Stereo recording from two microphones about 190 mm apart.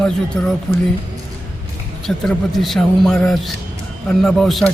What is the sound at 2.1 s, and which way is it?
A man's voice, centre (ahead or behind).